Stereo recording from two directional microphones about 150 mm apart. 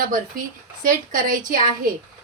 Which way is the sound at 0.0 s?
65° right (ahead or behind).